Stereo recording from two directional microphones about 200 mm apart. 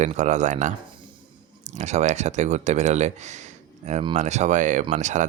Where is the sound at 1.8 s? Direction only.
35° right (ahead or behind).